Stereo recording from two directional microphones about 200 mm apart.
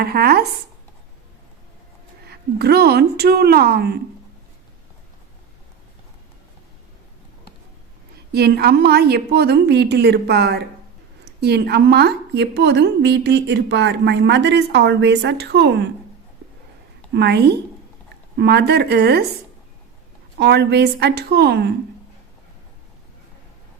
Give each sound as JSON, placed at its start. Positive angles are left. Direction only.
{"t": 0.0, "sound": "a woman's voice", "side_deg": -50}
{"t": 2.2, "sound": "a woman's voice", "side_deg": -55}
{"t": 8.3, "sound": "a woman's voice", "side_deg": -55}
{"t": 17.2, "sound": "a woman's voice", "side_deg": -55}
{"t": 20.4, "sound": "a woman's voice", "side_deg": -55}